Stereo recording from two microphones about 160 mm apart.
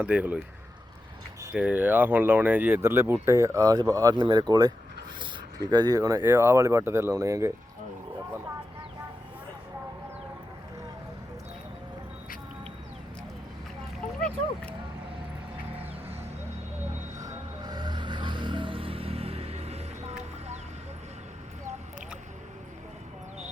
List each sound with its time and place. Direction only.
0.0 s speech: 10° right (ahead or behind)
1.5 s speech: 10° right (ahead or behind)
14.2 s a sound: 5° left (ahead or behind)
17.2 s vehicle: 25° right (ahead or behind); by 20.1 s 40° right (ahead or behind)